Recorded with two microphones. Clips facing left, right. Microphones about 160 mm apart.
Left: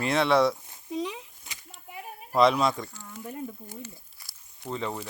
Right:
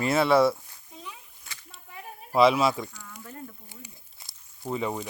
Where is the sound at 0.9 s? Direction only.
90° left.